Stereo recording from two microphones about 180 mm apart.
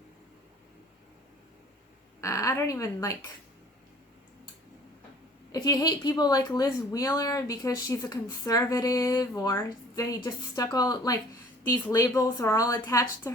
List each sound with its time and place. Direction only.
2.2 s speech: 15° left (ahead or behind)
5.5 s speech: 20° left (ahead or behind)